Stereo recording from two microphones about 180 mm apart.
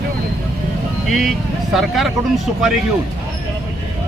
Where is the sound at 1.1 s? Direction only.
Centre (ahead or behind).